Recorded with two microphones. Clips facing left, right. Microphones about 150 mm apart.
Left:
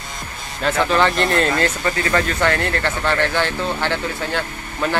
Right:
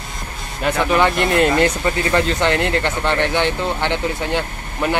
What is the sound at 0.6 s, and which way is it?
Speech, 15° right (ahead or behind).